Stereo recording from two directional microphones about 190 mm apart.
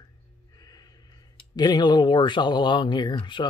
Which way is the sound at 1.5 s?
20° left (ahead or behind).